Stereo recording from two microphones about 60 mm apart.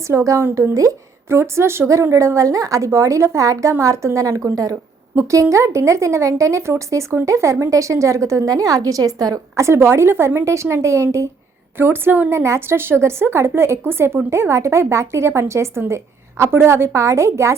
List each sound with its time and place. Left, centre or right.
0.1 s speech: right
0.5 s a woman's voice: right
1.3 s speech: right
5.3 s a woman's voice: right
9.6 s a woman's voice: right
11.8 s a woman's voice: right
12.3 s a woman's voice: right